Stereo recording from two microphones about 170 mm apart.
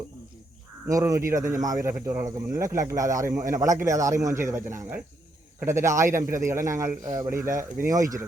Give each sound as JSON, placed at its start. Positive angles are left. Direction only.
{"t": 0.9, "sound": "speech", "side_deg": -20}